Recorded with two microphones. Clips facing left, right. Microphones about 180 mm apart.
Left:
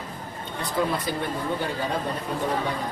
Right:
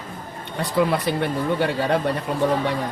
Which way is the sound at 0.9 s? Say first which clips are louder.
Right 5 dB; 70° right (ahead or behind).